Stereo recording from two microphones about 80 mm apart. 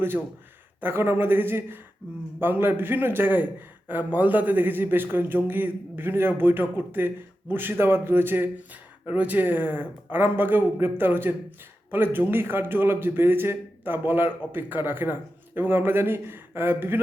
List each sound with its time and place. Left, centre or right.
0.8 s a man's voice: right